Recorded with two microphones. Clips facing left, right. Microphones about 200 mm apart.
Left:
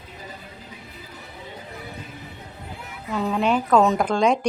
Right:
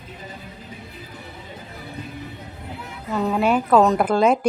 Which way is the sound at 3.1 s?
5° right (ahead or behind).